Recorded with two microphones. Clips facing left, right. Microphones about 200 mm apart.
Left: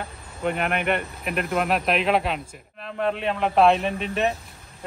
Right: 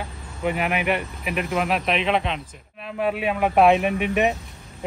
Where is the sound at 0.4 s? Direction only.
5° right (ahead or behind).